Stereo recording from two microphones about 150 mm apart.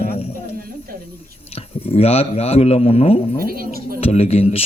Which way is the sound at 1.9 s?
40° left (ahead or behind).